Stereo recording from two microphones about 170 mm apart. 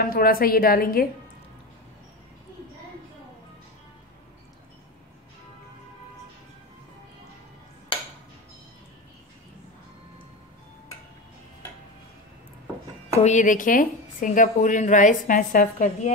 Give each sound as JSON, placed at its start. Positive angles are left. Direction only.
{"t": 0.0, "sound": "a woman's voice", "side_deg": 60}
{"t": 13.2, "sound": "a woman's voice", "side_deg": 45}